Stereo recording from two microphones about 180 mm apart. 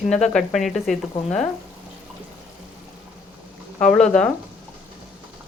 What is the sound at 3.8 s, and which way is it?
Speech, 5° left (ahead or behind).